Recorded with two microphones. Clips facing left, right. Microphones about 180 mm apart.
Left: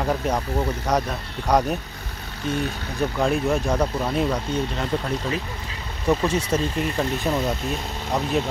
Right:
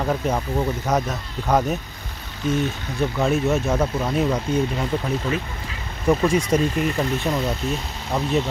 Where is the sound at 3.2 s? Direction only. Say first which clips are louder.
Right 1 dB; 5° right (ahead or behind).